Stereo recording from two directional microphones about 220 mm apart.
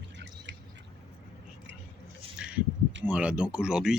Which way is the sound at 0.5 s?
55° right (ahead or behind).